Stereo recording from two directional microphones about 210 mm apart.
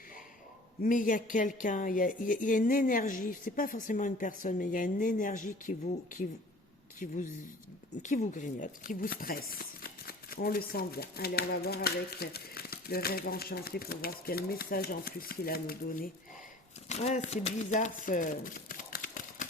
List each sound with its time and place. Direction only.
0.8 s a woman's voice: 40° left (ahead or behind)
16.9 s speech: 30° left (ahead or behind)